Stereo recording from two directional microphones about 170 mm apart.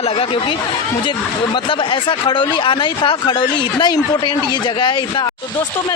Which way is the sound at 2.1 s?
30° left (ahead or behind).